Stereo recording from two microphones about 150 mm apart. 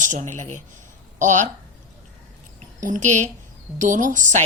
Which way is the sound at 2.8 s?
60° right (ahead or behind).